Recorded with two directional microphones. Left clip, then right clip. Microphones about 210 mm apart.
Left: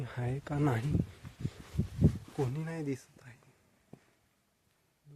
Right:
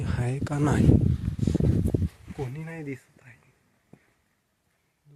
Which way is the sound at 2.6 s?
10° left (ahead or behind).